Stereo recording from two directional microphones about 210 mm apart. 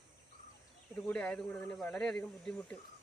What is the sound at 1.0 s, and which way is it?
Speech, 5° left (ahead or behind).